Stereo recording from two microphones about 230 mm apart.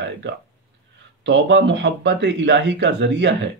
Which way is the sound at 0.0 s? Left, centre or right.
Right.